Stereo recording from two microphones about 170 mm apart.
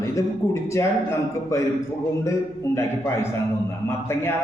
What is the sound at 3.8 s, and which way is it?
Speech, 15° left (ahead or behind).